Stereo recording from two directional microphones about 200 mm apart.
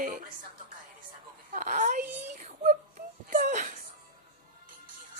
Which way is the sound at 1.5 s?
40° right (ahead or behind).